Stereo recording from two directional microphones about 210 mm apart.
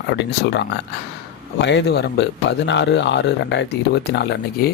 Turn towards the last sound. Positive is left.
turn(degrees=50)  # may be behind; listen again after turning